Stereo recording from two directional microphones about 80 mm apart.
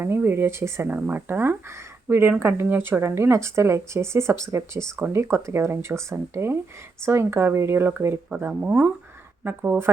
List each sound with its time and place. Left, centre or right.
0.0 s speech: right
0.9 s speech: right
5.2 s speech: right